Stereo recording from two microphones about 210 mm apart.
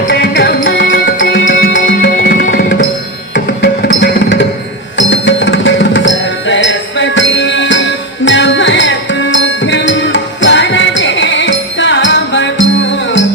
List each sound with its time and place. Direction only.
0.1 s music: 50° left (ahead or behind)
4.0 s music: 55° left (ahead or behind)